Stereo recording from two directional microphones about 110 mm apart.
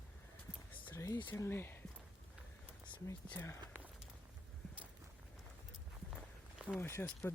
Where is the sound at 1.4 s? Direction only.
20° left (ahead or behind).